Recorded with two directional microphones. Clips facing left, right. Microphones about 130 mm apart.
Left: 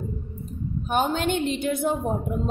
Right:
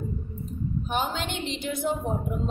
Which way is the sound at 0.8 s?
50° left (ahead or behind).